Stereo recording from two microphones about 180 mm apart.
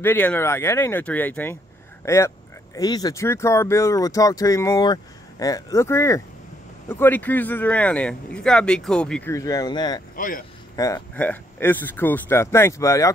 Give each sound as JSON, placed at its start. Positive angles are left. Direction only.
{"t": 0.0, "sound": "speech", "side_deg": 10}
{"t": 9.3, "sound": "speech", "side_deg": 20}
{"t": 10.1, "sound": "speech", "side_deg": 50}
{"t": 10.8, "sound": "speech", "side_deg": 20}